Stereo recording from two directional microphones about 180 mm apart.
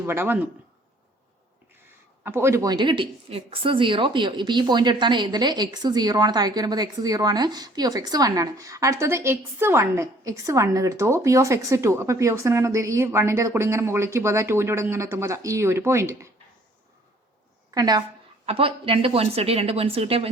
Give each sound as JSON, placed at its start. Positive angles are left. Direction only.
{"t": 0.0, "sound": "a woman's voice", "side_deg": -10}
{"t": 2.2, "sound": "a woman's voice", "side_deg": -15}
{"t": 17.7, "sound": "a woman's voice", "side_deg": -20}